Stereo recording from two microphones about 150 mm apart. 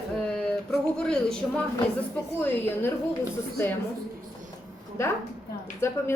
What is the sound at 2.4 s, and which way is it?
Speech, 15° left (ahead or behind).